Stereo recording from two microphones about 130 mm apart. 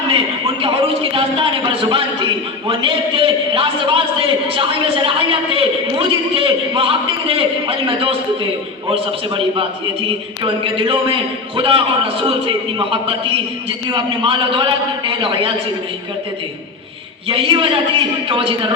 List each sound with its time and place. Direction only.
0.1 s a man's voice: 45° right (ahead or behind)
17.2 s a man's voice: 45° right (ahead or behind)